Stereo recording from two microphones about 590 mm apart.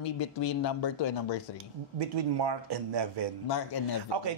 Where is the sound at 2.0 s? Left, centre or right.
Right.